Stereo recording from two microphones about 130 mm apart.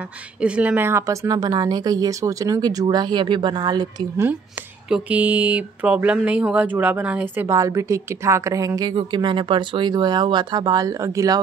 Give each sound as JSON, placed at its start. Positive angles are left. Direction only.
{"t": 0.4, "sound": "speech", "side_deg": -10}
{"t": 4.8, "sound": "speech", "side_deg": -10}
{"t": 7.4, "sound": "speech", "side_deg": -25}
{"t": 8.9, "sound": "speech", "side_deg": -40}